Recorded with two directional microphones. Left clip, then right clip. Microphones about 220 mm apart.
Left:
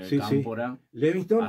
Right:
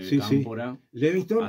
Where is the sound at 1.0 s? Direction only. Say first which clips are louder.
Even; 45° right (ahead or behind).